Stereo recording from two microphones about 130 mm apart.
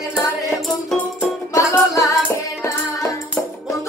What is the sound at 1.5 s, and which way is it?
Music, 25° left (ahead or behind).